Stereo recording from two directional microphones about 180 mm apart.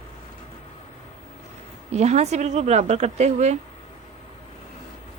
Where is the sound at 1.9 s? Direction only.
35° right (ahead or behind).